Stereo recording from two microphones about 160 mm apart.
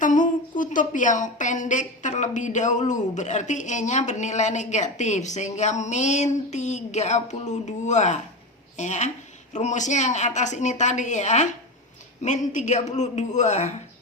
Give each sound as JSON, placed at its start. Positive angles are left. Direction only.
{"t": 0.0, "sound": "a woman's voice", "side_deg": 55}